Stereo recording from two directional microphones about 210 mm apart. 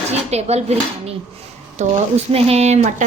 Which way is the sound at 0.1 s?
30° right (ahead or behind).